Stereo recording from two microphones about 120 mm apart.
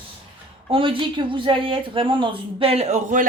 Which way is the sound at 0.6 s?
45° right (ahead or behind).